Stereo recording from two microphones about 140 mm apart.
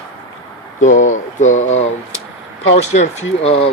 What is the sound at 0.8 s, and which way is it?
Speech, 65° left (ahead or behind).